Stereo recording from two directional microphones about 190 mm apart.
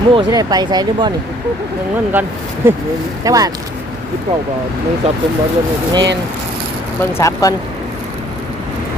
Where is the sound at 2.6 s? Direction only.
10° right (ahead or behind).